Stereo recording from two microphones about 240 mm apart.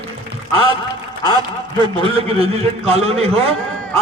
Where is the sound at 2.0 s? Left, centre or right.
Right.